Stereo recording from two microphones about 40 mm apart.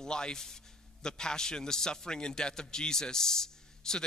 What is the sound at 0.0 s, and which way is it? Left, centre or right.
A man's voice, centre.